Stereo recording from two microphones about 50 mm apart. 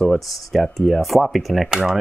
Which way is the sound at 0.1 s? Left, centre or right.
Centre.